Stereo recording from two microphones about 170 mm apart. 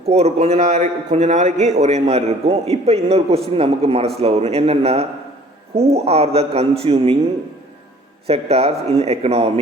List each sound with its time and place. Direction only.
0.1 s a man's voice: 40° right (ahead or behind)
8.3 s a man's voice: 35° right (ahead or behind)